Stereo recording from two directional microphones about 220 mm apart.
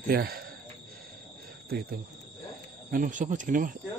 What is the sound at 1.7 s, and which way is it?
Speech, 45° right (ahead or behind).